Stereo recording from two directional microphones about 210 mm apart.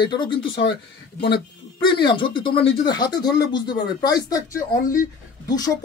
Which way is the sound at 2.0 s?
20° left (ahead or behind).